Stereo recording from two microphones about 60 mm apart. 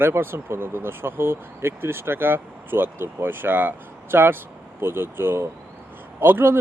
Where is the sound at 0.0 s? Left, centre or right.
Right.